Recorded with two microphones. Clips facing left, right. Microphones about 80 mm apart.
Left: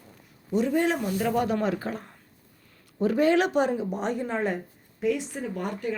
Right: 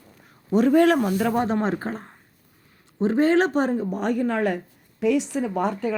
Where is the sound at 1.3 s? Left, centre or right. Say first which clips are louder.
Right 2 dB; right.